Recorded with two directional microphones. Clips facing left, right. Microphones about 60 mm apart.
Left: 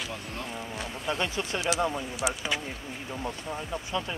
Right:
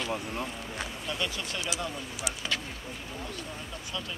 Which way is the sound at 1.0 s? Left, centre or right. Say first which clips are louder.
Left 6 dB; left.